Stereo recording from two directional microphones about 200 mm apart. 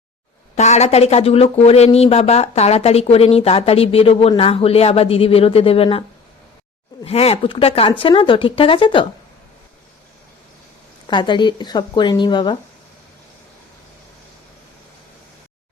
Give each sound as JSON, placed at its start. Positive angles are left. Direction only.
{"t": 0.5, "sound": "speech", "side_deg": 35}
{"t": 11.0, "sound": "speech", "side_deg": 25}